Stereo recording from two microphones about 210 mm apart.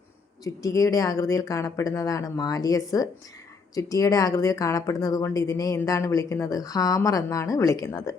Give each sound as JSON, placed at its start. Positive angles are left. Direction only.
{"t": 0.4, "sound": "speech", "side_deg": 15}